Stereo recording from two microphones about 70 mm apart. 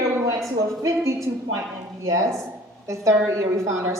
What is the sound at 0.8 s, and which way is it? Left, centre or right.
A woman's voice, right.